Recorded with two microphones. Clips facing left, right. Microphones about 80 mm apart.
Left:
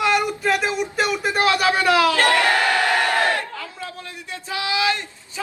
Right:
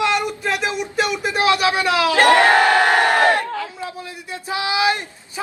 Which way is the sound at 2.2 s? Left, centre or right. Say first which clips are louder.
Right 5 dB; right.